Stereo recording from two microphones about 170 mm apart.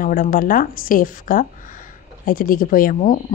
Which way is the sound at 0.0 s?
55° left (ahead or behind).